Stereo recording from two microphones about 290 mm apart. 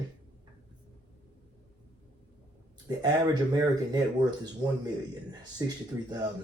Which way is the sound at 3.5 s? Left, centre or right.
Centre.